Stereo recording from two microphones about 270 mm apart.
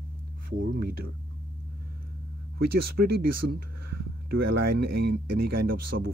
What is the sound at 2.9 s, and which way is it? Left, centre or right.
Speech, right.